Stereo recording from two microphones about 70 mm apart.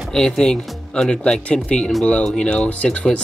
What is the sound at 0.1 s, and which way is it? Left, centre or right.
Speech, centre.